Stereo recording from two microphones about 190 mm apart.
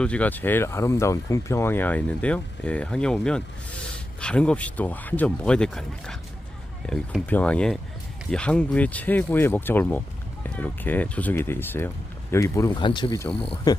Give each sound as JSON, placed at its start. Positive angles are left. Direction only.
{"t": 0.0, "sound": "speech", "side_deg": 5}